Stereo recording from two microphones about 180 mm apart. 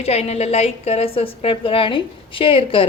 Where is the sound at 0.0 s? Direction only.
35° left (ahead or behind).